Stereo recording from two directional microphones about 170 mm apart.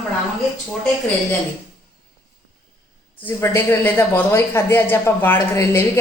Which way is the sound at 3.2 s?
15° left (ahead or behind).